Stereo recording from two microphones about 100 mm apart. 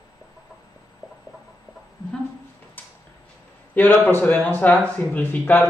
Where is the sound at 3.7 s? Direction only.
20° left (ahead or behind).